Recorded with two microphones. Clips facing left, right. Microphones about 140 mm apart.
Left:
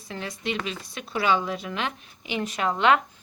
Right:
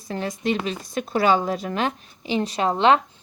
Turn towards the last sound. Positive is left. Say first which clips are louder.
# right 3 dB
turn(degrees=-30)  # may be behind; listen again after turning